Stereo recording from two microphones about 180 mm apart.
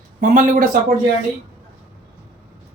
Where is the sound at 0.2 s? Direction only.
45° right (ahead or behind).